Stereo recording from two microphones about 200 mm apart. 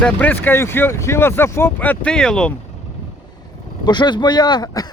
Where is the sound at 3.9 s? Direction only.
20° left (ahead or behind).